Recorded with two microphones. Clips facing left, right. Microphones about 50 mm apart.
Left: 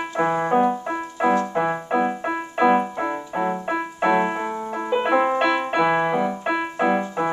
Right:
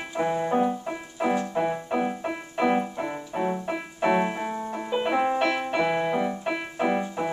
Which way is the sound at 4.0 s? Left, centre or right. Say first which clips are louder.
Left 3 dB; left.